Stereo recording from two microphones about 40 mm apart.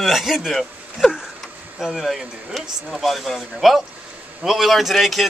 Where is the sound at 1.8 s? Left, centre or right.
Centre.